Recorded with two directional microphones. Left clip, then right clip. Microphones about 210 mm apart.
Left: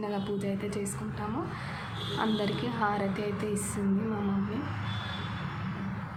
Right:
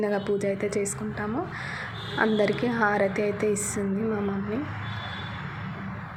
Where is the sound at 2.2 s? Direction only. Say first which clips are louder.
Right 8 dB; 20° right (ahead or behind).